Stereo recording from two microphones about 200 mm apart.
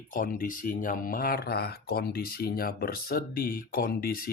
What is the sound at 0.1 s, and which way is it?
Speech, 45° left (ahead or behind).